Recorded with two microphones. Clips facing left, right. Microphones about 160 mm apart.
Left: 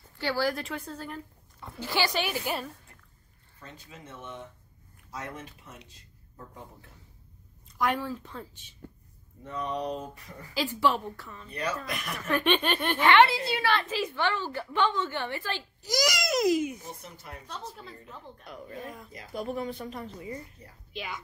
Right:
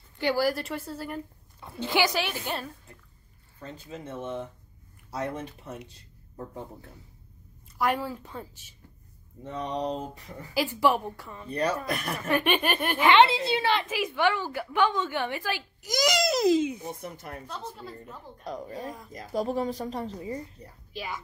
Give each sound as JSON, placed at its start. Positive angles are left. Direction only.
{"t": 0.2, "sound": "a woman's voice", "side_deg": -15}
{"t": 0.5, "sound": "a woman's voice", "side_deg": -5}
{"t": 2.1, "sound": "a woman's voice", "side_deg": 0}
{"t": 3.6, "sound": "speech", "side_deg": -30}
{"t": 7.7, "sound": "a woman's voice", "side_deg": -5}
{"t": 9.4, "sound": "speech", "side_deg": -25}
{"t": 10.5, "sound": "a woman's voice", "side_deg": -10}
{"t": 11.5, "sound": "speech", "side_deg": -35}
{"t": 12.3, "sound": "a woman's voice", "side_deg": -10}
{"t": 13.1, "sound": "a woman's voice", "side_deg": -20}
{"t": 16.8, "sound": "speech", "side_deg": -50}
{"t": 18.4, "sound": "speech", "side_deg": -40}